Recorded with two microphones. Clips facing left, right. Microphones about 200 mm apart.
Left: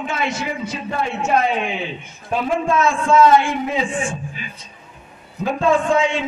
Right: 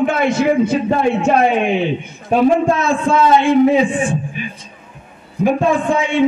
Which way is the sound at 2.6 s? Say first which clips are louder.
Right 3 dB; 35° right (ahead or behind).